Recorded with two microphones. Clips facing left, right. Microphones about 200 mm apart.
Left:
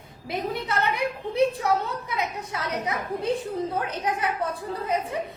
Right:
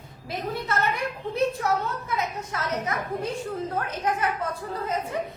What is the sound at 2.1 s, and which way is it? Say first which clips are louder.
A woman's voice: right 1 dB; 15° left (ahead or behind).